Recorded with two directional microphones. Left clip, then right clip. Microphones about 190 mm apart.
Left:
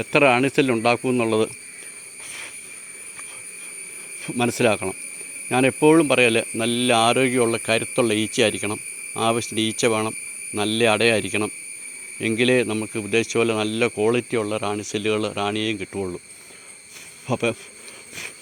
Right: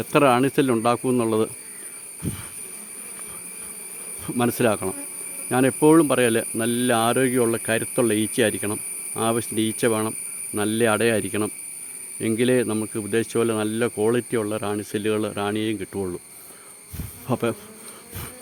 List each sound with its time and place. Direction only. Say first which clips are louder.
0.0 s speech: left 1 dB; 20° right (ahead or behind)
4.3 s speech: left 1 dB; 20° right (ahead or behind)
17.2 s speech: left 1 dB; 25° right (ahead or behind)